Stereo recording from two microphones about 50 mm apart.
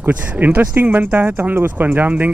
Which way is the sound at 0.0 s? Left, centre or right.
Right.